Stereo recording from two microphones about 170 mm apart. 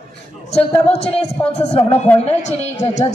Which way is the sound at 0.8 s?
35° left (ahead or behind).